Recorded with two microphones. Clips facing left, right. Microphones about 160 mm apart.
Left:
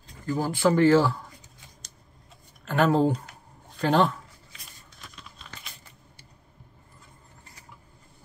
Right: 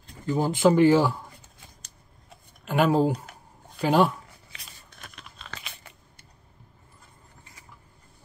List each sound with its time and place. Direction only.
0.3 s speech: 20° right (ahead or behind)
2.6 s speech: 10° right (ahead or behind)
4.5 s biting: 60° right (ahead or behind); by 5.9 s 85° right